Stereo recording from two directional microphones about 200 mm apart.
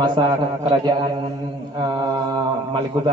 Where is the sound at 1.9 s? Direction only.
20° right (ahead or behind).